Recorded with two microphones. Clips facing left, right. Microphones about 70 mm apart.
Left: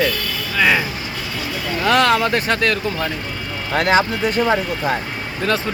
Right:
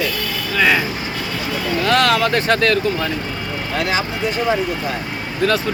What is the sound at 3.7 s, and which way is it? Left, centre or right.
Speech, left.